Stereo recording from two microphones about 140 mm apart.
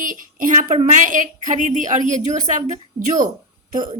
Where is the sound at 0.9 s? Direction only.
65° right (ahead or behind).